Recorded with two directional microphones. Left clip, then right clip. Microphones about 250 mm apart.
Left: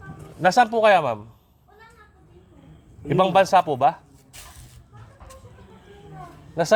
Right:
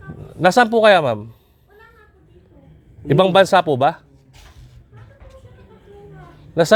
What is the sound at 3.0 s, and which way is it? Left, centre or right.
Speech, right.